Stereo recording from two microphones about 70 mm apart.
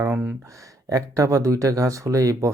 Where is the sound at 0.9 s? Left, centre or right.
Right.